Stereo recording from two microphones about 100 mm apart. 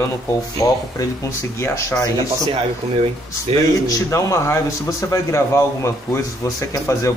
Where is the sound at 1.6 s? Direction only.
30° left (ahead or behind).